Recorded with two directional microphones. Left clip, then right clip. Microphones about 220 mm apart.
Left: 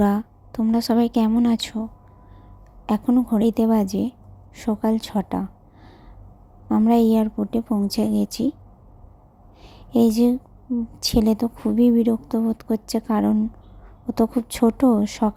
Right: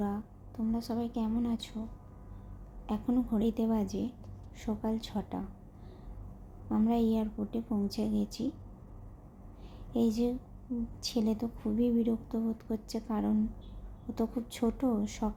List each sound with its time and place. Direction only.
0.0 s a woman's voice: 45° left (ahead or behind)
2.8 s a woman's voice: 40° left (ahead or behind)
6.7 s a woman's voice: 40° left (ahead or behind)
9.6 s a sound: 40° left (ahead or behind)
11.0 s a woman's voice: 40° left (ahead or behind)